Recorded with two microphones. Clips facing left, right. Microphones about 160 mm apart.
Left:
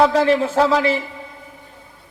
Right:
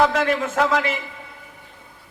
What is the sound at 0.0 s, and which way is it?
A man's voice, 30° left (ahead or behind).